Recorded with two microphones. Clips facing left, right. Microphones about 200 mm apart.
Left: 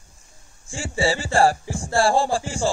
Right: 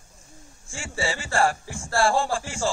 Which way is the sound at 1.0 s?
35° left (ahead or behind).